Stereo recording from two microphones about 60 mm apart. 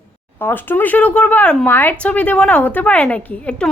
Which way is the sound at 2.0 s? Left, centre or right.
Left.